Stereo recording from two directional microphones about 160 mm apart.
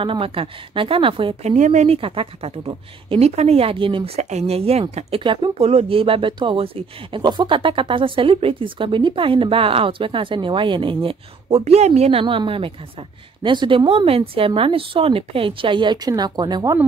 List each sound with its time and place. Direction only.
0.0 s a woman's voice: 35° right (ahead or behind)